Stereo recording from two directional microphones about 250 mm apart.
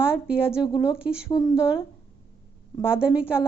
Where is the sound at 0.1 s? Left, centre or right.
Centre.